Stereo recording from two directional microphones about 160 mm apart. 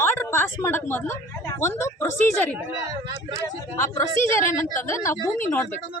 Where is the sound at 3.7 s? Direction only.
20° left (ahead or behind).